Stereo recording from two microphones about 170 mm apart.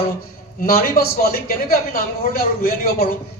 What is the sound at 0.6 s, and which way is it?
A man's voice, 60° left (ahead or behind).